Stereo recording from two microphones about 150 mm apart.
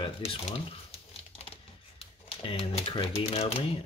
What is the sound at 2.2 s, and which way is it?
Speech, 40° left (ahead or behind).